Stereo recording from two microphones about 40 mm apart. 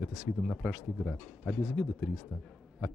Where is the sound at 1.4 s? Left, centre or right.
Centre.